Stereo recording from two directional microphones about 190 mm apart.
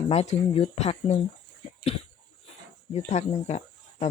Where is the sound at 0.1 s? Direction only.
35° left (ahead or behind).